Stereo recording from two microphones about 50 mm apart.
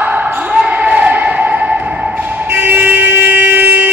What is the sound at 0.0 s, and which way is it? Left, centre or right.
Basketball bounce, right.